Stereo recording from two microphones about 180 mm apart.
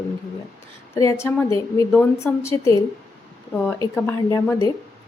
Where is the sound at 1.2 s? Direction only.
15° left (ahead or behind).